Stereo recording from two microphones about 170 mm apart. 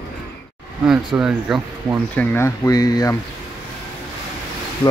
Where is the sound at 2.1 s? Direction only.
15° left (ahead or behind).